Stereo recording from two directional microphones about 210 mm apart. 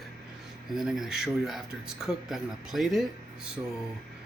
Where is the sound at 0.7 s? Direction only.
Centre (ahead or behind).